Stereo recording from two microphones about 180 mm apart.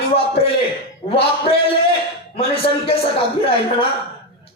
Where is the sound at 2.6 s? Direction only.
30° left (ahead or behind).